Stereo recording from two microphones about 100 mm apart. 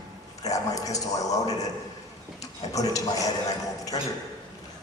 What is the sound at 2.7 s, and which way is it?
A man's voice, 35° left (ahead or behind).